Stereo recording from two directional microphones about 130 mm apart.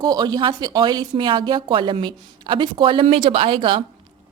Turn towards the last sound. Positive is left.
turn(degrees=-40)  # may be behind; listen again after turning